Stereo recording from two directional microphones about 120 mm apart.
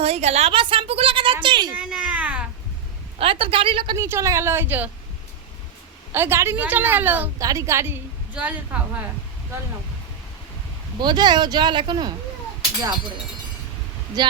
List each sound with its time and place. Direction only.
0.0 s a woman's voice: 65° right (ahead or behind)
0.5 s a sound: 45° right (ahead or behind)
1.7 s a sound: 10° right (ahead or behind)
3.2 s a woman's voice: 50° right (ahead or behind)
3.9 s a woman's voice: 25° right (ahead or behind)
6.1 s a woman's voice: 20° right (ahead or behind)
7.3 s a woman's voice: 30° right (ahead or behind)
11.0 s speech: 35° right (ahead or behind)
14.2 s speech: 35° right (ahead or behind)